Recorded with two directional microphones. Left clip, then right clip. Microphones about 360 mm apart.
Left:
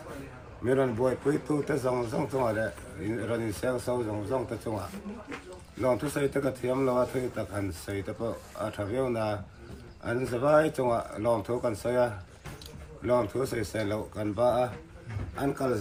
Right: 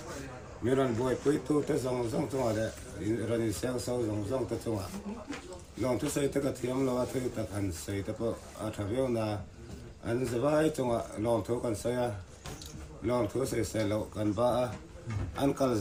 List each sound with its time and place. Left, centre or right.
0.6 s speech: centre
5.8 s speech: centre